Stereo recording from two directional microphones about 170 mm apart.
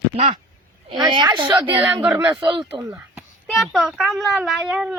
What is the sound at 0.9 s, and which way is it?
Speech, 30° right (ahead or behind).